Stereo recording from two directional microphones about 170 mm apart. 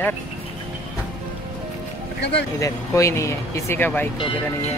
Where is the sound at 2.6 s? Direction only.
15° left (ahead or behind).